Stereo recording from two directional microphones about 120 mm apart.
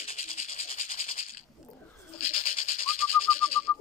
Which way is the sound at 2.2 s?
55° left (ahead or behind).